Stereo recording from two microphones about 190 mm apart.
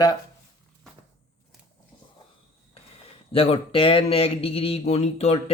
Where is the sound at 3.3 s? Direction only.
30° left (ahead or behind).